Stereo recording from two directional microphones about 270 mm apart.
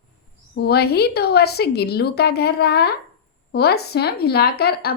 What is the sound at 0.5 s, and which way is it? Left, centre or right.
A woman's voice, left.